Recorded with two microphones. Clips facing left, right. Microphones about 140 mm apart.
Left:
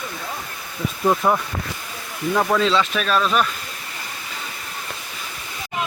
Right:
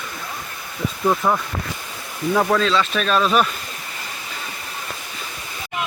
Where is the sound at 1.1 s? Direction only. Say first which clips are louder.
Left 1 dB; 10° left (ahead or behind).